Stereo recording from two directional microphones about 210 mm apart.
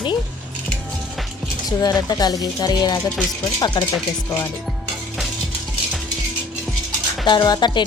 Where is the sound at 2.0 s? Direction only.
20° left (ahead or behind).